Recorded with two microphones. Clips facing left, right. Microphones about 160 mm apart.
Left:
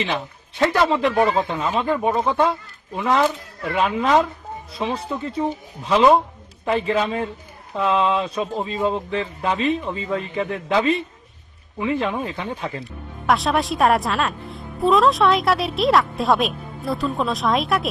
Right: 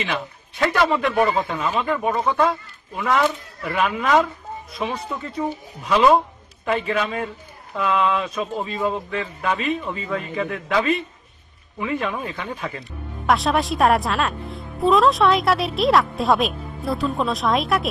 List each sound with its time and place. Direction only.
0.0 s speech: 25° left (ahead or behind)
13.3 s a woman's voice: centre (ahead or behind)